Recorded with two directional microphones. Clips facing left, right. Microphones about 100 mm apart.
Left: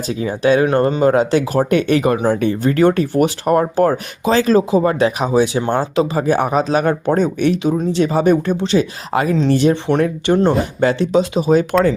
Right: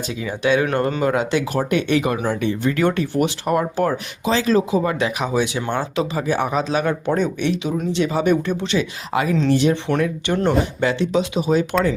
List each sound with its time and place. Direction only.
0.2 s speech: 40° left (ahead or behind)
0.6 s speech: 25° left (ahead or behind)
1.0 s speech: 35° left (ahead or behind)